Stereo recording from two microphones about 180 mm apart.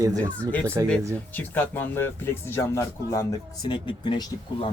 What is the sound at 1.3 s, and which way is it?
Speech, 10° left (ahead or behind).